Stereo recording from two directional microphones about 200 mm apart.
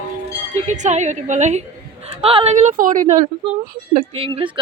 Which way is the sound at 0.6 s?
35° right (ahead or behind).